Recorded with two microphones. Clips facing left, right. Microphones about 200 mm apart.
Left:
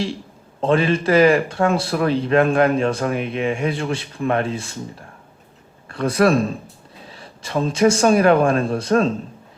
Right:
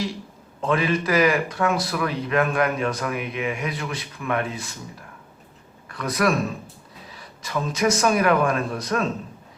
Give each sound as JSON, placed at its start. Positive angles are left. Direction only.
{"t": 0.6, "sound": "speech", "side_deg": 30}